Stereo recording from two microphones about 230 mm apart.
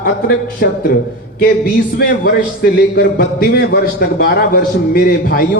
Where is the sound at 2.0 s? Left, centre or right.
Left.